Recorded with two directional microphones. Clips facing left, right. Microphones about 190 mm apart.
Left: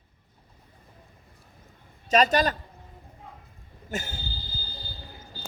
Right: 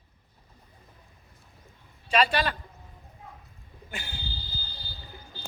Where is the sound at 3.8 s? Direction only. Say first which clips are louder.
Left 7 dB; 45° left (ahead or behind).